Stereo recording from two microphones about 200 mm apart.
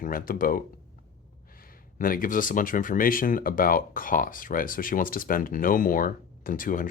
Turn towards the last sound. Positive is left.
turn(degrees=40)  # may be behind; listen again after turning